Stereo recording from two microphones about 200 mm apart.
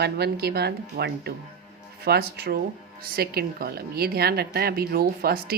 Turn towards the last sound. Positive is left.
turn(degrees=-50)  # may be behind; listen again after turning